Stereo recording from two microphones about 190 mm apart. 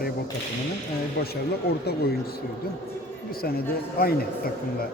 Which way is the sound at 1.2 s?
55° left (ahead or behind).